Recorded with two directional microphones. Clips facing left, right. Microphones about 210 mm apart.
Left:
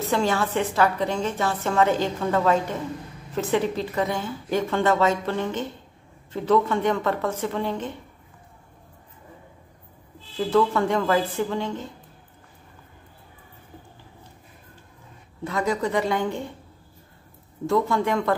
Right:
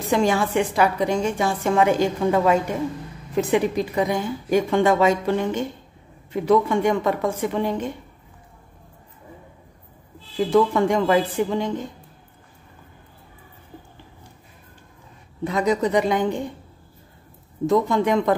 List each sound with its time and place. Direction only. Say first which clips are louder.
0.1 s a woman's voice: right 4 dB; 15° right (ahead or behind)
10.3 s a woman's voice: right 3 dB; 15° right (ahead or behind)
15.4 s a woman's voice: right 4 dB; 20° right (ahead or behind)
17.6 s speech: right 3 dB; 20° right (ahead or behind)